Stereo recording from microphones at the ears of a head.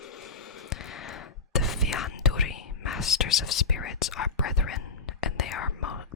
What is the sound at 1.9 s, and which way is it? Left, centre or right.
Whispering, left.